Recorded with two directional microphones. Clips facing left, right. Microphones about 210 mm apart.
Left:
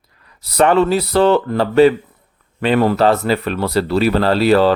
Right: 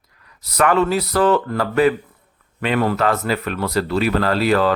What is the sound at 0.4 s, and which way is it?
Speech, 30° left (ahead or behind).